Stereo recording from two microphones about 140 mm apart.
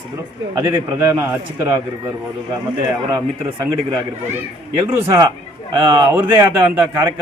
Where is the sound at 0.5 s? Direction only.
20° right (ahead or behind).